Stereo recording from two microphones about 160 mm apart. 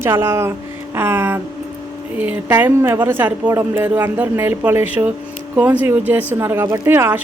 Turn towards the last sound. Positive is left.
turn(degrees=-15)  # may be behind; listen again after turning